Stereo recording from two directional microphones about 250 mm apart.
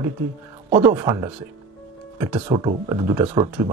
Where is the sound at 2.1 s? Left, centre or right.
Centre.